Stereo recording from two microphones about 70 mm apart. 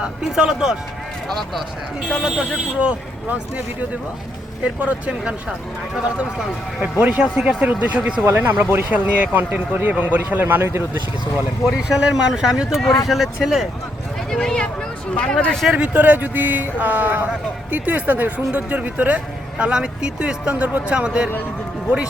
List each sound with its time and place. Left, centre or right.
0.0 s speech: centre
2.0 s speech: centre
2.7 s speech: centre
4.6 s speech: centre
7.0 s speech: centre
8.2 s speech: right
8.9 s speech: right
10.6 s speech: right
11.8 s speech: centre
14.3 s speech: centre
15.7 s speech: right